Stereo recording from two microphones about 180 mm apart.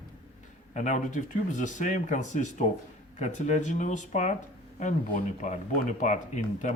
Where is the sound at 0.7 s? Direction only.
45° left (ahead or behind).